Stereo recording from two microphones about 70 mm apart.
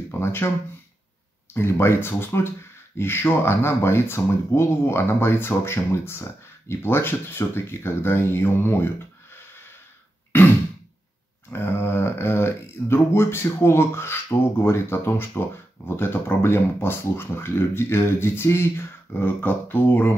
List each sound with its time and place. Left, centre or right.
0.1 s speech: left
1.5 s speech: left
11.5 s speech: left